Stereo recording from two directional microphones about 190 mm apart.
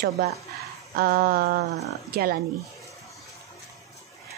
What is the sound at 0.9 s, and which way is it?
A woman's voice, 50° right (ahead or behind).